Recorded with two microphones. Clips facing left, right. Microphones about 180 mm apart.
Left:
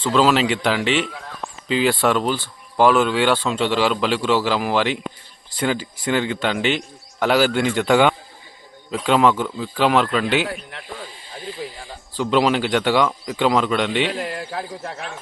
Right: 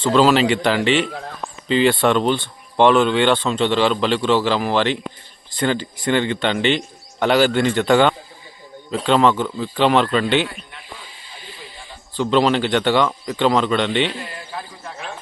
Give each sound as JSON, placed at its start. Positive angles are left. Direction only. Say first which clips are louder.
{"t": 0.0, "sound": "speech", "louder": "right 2 dB", "side_deg": 0}
{"t": 10.5, "sound": "speech", "louder": "left 7 dB", "side_deg": 85}
{"t": 12.1, "sound": "speech", "louder": "right 1 dB", "side_deg": 5}